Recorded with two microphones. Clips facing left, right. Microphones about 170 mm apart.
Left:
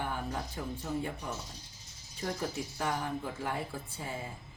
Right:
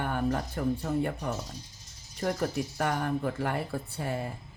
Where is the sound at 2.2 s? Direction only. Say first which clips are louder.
Right 6 dB; 65° right (ahead or behind).